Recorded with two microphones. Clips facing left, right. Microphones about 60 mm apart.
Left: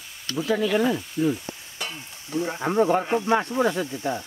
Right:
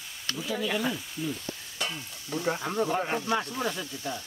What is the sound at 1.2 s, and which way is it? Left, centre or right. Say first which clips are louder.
Sizzle: left 12 dB; left.